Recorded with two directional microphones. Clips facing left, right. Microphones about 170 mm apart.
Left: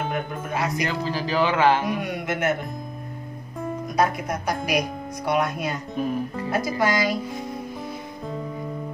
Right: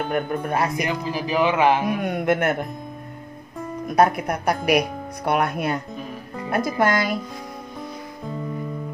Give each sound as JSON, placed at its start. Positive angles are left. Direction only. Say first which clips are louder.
{"t": 0.1, "sound": "speech", "louder": "right 5 dB", "side_deg": -55}
{"t": 0.8, "sound": "speech", "louder": "right 1 dB", "side_deg": -15}
{"t": 1.9, "sound": "speech", "louder": "right 5 dB", "side_deg": -55}
{"t": 3.9, "sound": "speech", "louder": "right 5 dB", "side_deg": -60}